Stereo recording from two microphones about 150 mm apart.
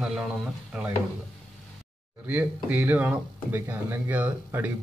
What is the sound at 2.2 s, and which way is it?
Speech, 10° right (ahead or behind).